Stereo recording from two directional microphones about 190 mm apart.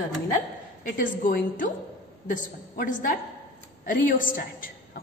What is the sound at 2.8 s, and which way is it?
A woman's voice, 45° left (ahead or behind).